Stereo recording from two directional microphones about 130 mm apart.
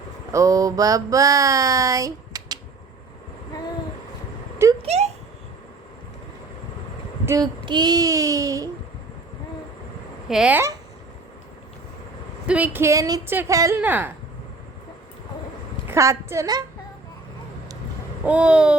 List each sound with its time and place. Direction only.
0.3 s a sound: 25° right (ahead or behind)
4.8 s a child's voice: 55° right (ahead or behind)
7.3 s child singing: 25° right (ahead or behind)
7.6 s a sound: 35° right (ahead or behind)
10.2 s speech: 5° right (ahead or behind)
12.5 s a sound: 10° right (ahead or behind)
13.8 s babbling: 15° right (ahead or behind)
15.9 s a woman's voice: 20° right (ahead or behind)
18.3 s babbling: 10° right (ahead or behind)